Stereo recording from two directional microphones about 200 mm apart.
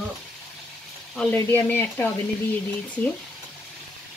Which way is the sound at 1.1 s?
10° left (ahead or behind).